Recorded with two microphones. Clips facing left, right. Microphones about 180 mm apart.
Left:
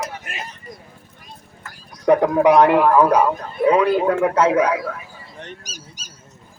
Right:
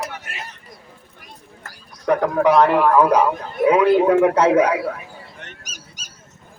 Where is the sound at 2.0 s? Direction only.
15° left (ahead or behind).